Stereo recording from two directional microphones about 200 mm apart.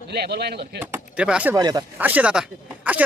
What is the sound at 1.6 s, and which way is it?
Speech, 20° right (ahead or behind).